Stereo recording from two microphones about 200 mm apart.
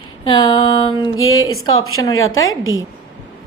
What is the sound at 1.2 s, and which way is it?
A woman's voice, 90° left.